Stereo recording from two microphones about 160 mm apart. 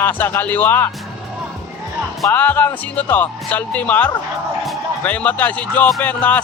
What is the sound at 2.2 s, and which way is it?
Speech, 10° left (ahead or behind).